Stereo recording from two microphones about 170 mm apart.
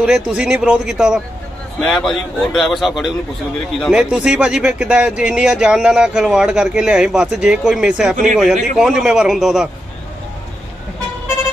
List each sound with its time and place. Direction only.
0.0 s speech: 5° right (ahead or behind)